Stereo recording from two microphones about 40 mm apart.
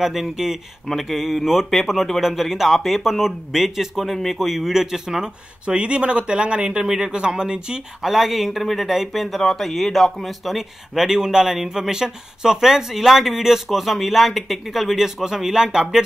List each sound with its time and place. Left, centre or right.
0.0 s speech: centre
5.7 s speech: right
8.0 s speech: centre
9.4 s speech: centre